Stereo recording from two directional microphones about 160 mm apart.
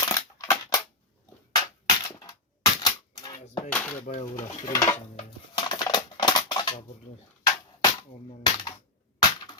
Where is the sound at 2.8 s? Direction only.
25° left (ahead or behind).